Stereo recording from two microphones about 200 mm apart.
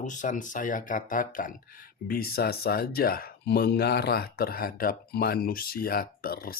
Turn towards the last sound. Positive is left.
turn(degrees=50)  # may be behind; listen again after turning